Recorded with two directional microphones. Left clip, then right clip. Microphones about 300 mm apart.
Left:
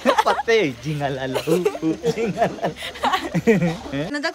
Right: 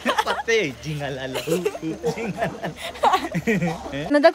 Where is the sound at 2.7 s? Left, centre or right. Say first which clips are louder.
Right 2 dB; centre.